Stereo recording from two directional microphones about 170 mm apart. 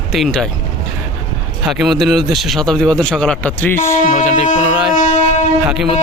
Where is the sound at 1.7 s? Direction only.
Centre (ahead or behind); by 4.0 s 15° left (ahead or behind).